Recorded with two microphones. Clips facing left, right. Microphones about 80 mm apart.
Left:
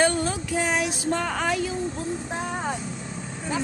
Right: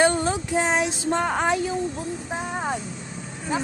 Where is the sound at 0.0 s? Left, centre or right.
Right.